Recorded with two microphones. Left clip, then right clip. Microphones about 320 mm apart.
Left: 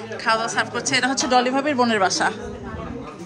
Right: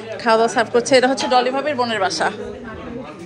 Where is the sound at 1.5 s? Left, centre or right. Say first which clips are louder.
Even; centre.